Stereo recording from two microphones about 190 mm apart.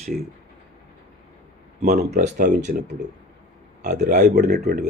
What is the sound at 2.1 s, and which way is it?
Speech, 40° right (ahead or behind).